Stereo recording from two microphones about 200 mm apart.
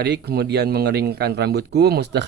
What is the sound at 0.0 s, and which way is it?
Speech, 55° right (ahead or behind).